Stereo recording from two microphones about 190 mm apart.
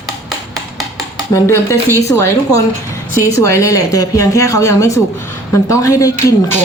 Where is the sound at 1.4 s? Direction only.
15° left (ahead or behind).